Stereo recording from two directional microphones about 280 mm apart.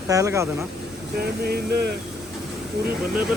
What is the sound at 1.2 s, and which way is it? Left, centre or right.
Speech, right.